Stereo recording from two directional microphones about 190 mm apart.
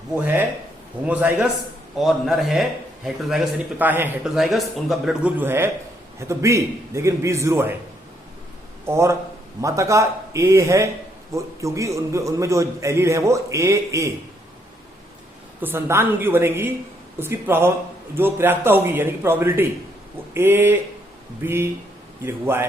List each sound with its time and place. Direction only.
0.2 s a man's voice: 10° right (ahead or behind)
8.9 s a man's voice: 15° right (ahead or behind)
15.6 s a man's voice: 10° right (ahead or behind)